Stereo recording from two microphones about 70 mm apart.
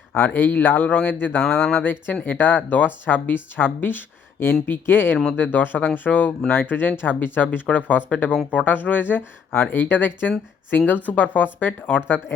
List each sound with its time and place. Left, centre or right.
0.2 s speech: left